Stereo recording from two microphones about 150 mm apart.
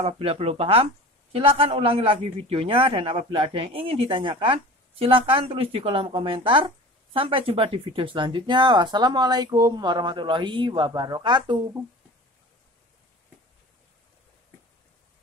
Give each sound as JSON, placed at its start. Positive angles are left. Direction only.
{"t": 0.0, "sound": "a man's voice", "side_deg": -40}